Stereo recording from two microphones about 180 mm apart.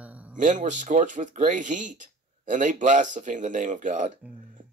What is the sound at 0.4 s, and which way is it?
Speech, 45° right (ahead or behind).